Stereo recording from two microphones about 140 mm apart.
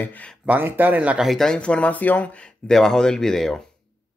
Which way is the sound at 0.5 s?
15° right (ahead or behind).